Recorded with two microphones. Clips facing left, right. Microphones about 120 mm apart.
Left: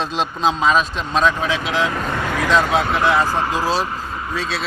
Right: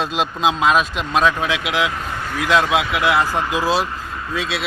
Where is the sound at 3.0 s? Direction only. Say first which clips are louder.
Even; 10° right (ahead or behind).